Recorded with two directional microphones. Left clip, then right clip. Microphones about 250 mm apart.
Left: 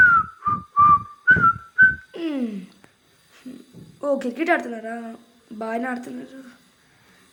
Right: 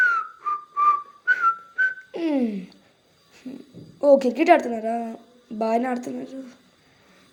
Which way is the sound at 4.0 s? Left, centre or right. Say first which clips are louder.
Right 7 dB; centre.